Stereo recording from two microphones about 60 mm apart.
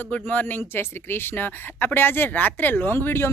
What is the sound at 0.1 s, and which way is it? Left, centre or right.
Speech, left.